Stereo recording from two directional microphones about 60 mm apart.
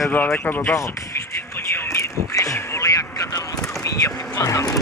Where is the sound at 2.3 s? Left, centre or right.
Left.